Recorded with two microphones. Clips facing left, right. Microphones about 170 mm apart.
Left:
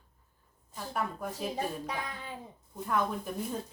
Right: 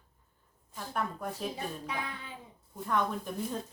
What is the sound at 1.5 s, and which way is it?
Speech, 40° left (ahead or behind).